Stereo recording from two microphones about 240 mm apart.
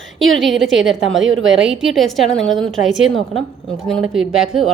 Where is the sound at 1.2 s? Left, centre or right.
Right.